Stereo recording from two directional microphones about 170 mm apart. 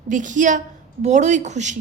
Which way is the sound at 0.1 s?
50° right (ahead or behind).